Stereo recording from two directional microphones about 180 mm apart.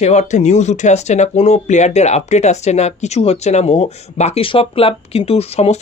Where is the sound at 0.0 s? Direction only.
40° left (ahead or behind).